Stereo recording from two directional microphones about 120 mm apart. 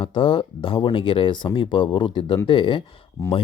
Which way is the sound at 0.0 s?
45° left (ahead or behind).